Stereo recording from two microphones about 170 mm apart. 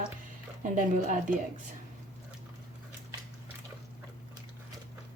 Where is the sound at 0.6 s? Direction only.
50° right (ahead or behind).